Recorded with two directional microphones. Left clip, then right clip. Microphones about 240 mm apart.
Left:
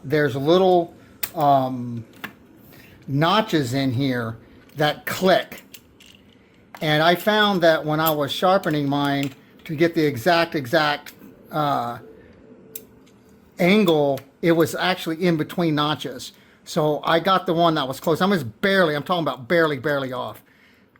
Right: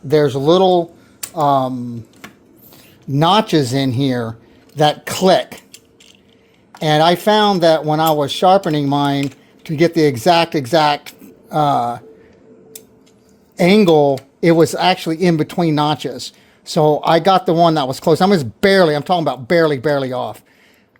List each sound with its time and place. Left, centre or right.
0.1 s speech: right
6.7 s speech: right
13.6 s speech: right